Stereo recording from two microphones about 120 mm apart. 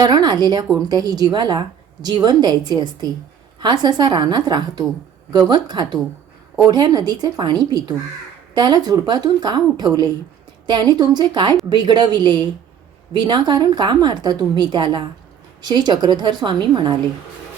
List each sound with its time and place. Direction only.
0.0 s a woman's voice: 35° right (ahead or behind)